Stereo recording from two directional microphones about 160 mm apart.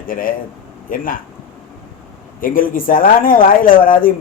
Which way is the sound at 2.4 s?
60° left (ahead or behind).